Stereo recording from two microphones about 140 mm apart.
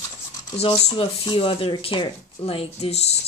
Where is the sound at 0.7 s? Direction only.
40° left (ahead or behind).